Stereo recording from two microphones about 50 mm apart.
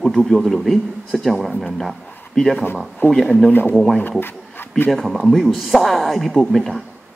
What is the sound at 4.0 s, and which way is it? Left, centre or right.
Speech, left.